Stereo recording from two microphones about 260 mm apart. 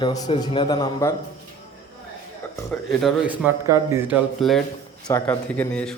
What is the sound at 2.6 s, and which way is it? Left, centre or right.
A man's voice, centre.